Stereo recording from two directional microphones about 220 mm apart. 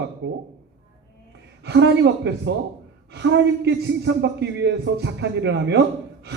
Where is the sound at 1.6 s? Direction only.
50° right (ahead or behind).